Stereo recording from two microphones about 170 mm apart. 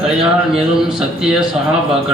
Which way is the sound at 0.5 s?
5° right (ahead or behind).